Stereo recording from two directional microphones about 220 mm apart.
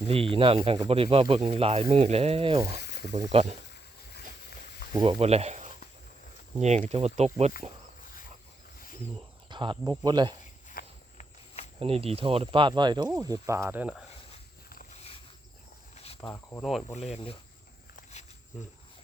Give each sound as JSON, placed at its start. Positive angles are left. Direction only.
{"t": 0.1, "sound": "speech", "side_deg": -25}
{"t": 2.8, "sound": "snake", "side_deg": 50}
{"t": 3.2, "sound": "speech", "side_deg": -30}
{"t": 4.9, "sound": "speech", "side_deg": -20}
{"t": 9.5, "sound": "speech", "side_deg": -20}
{"t": 10.7, "sound": "walk", "side_deg": 35}
{"t": 11.8, "sound": "speech", "side_deg": -25}
{"t": 16.3, "sound": "speech", "side_deg": 10}
{"t": 17.1, "sound": "speech", "side_deg": 25}
{"t": 17.9, "sound": "walk", "side_deg": 30}